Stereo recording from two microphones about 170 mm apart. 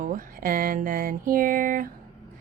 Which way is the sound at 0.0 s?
50° right (ahead or behind).